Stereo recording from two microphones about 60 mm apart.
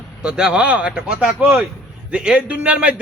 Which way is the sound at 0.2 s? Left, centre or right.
Centre.